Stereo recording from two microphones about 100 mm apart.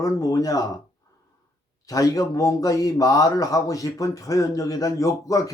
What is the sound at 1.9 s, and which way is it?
Speech, 35° left (ahead or behind).